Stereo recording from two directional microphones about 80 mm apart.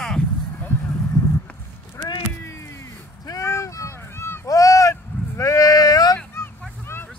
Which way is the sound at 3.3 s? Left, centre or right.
Left.